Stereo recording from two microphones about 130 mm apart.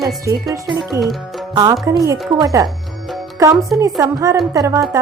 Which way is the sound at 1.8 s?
25° right (ahead or behind).